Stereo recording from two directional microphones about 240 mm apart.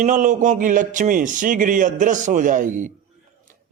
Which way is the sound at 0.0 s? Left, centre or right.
Right.